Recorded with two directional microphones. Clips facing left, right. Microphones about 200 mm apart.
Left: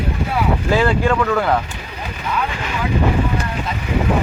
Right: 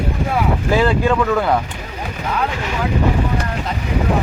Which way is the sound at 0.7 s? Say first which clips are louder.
Right 1 dB; 15° right (ahead or behind).